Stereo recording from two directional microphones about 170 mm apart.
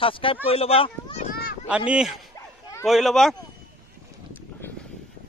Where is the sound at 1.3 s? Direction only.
65° left (ahead or behind).